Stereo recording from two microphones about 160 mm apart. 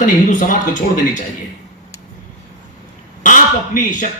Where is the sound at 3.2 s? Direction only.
55° left (ahead or behind).